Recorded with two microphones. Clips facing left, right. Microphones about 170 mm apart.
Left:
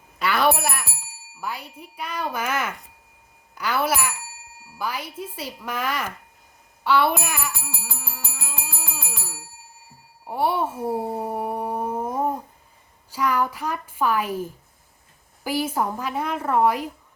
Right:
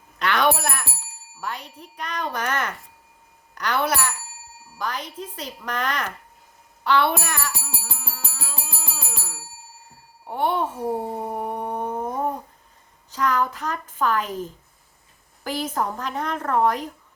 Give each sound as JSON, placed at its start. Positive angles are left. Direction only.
{"t": 0.2, "sound": "a sound", "side_deg": 5}
{"t": 1.4, "sound": "a woman's voice", "side_deg": 5}
{"t": 7.5, "sound": "rattle", "side_deg": -20}
{"t": 8.1, "sound": "music", "side_deg": 15}
{"t": 10.2, "sound": "a sound", "side_deg": 5}
{"t": 13.1, "sound": "a woman's voice", "side_deg": 10}